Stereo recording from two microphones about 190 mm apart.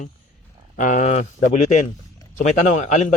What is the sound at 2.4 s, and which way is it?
Speech, 40° left (ahead or behind).